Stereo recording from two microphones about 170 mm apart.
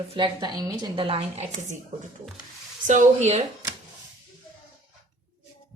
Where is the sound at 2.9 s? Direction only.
40° right (ahead or behind).